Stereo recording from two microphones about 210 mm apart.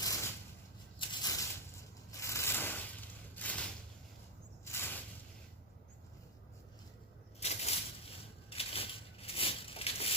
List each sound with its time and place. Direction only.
0.0 s a sound: 15° left (ahead or behind)
4.6 s snake: 10° left (ahead or behind)
7.3 s crushing: 30° left (ahead or behind)